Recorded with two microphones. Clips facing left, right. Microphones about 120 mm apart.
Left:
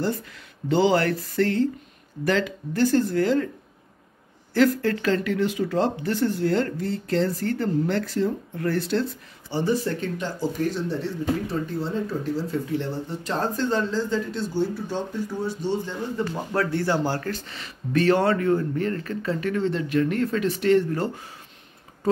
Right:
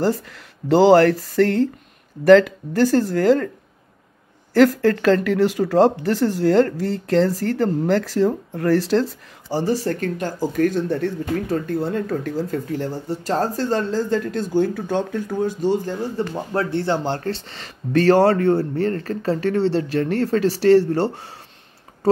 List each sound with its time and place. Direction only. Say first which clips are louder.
0.7 s speech: right 7 dB; 90° right
1.3 s speech: right 5 dB; 45° right (ahead or behind)
4.8 s speech: right 7 dB; 50° right (ahead or behind)
6.1 s speech: right 3 dB; 90° right
6.4 s speech: right 7 dB; 40° right (ahead or behind)
8.0 s speech: right 6 dB; 90° right
8.3 s speech: right 6 dB; 40° right (ahead or behind)
8.7 s speech: right 7 dB; 90° right
9.5 s speech: right 3 dB; 35° right (ahead or behind)
16.5 s speech: right 2 dB; 20° right (ahead or behind)
17.2 s speech: right 4 dB; 35° right (ahead or behind)